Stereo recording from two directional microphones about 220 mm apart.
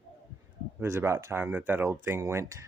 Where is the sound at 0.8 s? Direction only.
10° right (ahead or behind).